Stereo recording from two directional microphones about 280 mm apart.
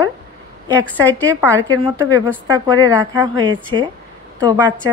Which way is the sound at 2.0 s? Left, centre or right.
Centre.